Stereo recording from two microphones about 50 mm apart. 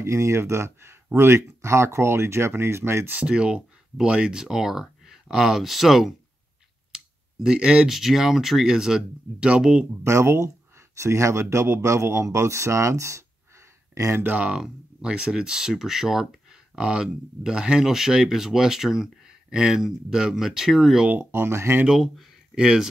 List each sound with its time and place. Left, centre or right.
0.0 s speech: right
3.3 s speech: centre
6.9 s clicking: centre
7.5 s speech: right
7.9 s speech: centre
10.0 s speech: right
11.0 s speech: right
14.6 s speech: centre
21.2 s speech: right
21.8 s speech: centre
22.6 s speech: centre